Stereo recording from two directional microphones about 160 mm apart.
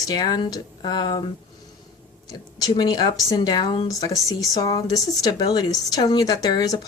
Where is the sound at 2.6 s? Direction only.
25° left (ahead or behind).